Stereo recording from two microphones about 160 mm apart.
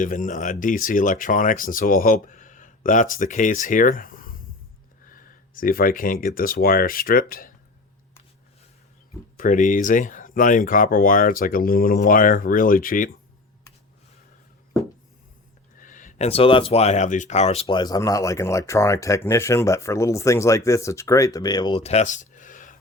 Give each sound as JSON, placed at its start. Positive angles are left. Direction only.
{"t": 0.0, "sound": "speech", "side_deg": 55}
{"t": 9.4, "sound": "speech", "side_deg": 55}
{"t": 15.8, "sound": "speech", "side_deg": 55}